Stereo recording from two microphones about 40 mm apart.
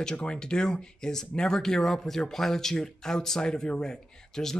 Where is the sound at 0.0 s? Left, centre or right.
Left.